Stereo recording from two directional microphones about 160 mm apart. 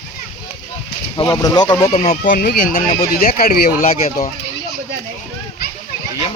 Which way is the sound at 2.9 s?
55° left (ahead or behind).